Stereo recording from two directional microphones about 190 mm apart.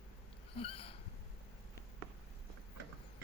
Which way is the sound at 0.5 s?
30° left (ahead or behind).